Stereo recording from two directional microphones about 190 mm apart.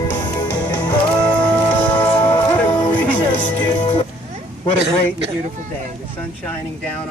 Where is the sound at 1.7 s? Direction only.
10° left (ahead or behind).